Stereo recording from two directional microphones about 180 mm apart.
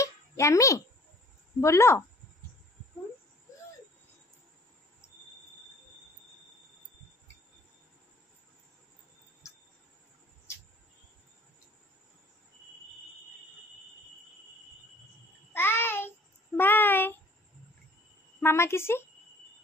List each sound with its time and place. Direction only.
0.0 s a sound: 15° left (ahead or behind)
1.6 s a woman's voice: 15° left (ahead or behind)
15.5 s child singing: 10° left (ahead or behind)
18.4 s a woman's voice: 15° left (ahead or behind)